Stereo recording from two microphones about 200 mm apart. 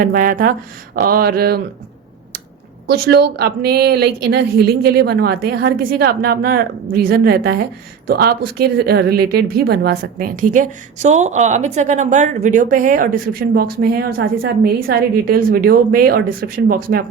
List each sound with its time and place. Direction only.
0.0 s speech: 45° right (ahead or behind)
2.8 s a woman's voice: 50° right (ahead or behind)